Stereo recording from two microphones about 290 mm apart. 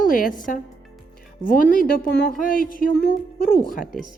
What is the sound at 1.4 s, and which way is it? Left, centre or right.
A woman's voice, left.